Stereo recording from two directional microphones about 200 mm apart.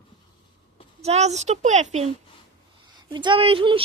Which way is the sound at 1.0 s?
35° right (ahead or behind).